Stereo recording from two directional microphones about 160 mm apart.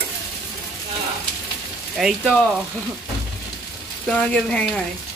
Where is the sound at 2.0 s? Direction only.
Centre (ahead or behind).